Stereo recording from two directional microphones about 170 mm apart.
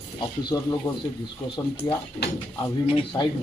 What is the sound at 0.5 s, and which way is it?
Speech, 20° left (ahead or behind).